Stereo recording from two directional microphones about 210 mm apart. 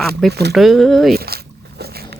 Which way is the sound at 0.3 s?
50° right (ahead or behind).